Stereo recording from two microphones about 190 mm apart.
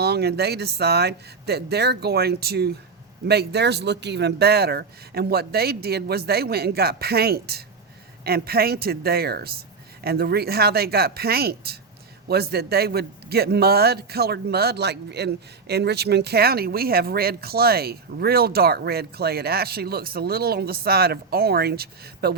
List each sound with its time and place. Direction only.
0.0 s a man's voice: 60° right (ahead or behind)